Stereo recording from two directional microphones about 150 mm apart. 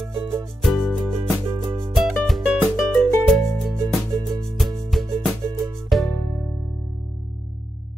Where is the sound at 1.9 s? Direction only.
Centre (ahead or behind).